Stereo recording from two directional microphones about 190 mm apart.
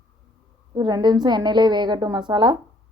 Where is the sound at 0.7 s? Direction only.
20° right (ahead or behind).